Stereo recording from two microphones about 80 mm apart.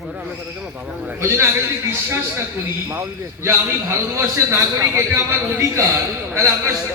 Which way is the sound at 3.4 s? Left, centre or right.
Right.